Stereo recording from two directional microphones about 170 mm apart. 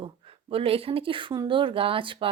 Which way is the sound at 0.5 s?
35° right (ahead or behind).